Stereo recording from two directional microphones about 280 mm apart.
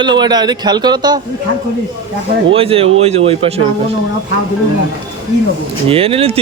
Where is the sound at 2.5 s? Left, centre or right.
Centre.